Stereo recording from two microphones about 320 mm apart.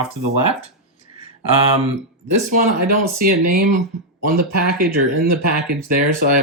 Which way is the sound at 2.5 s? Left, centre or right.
Right.